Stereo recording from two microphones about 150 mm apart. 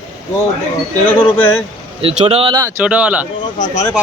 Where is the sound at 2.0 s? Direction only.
45° right (ahead or behind).